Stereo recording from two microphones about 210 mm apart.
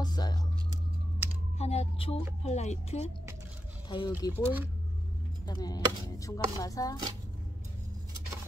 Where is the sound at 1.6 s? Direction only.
30° left (ahead or behind).